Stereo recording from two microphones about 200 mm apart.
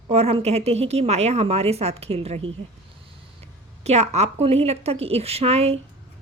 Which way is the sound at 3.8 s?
35° right (ahead or behind).